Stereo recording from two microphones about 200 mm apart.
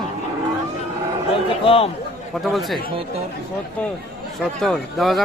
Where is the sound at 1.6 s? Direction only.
30° left (ahead or behind).